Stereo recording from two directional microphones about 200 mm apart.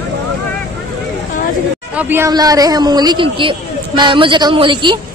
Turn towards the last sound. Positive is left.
turn(degrees=-25)  # may be behind; listen again after turning